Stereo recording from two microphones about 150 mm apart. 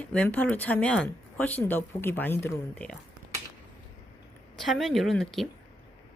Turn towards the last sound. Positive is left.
turn(degrees=0)  # may be behind; listen again after turning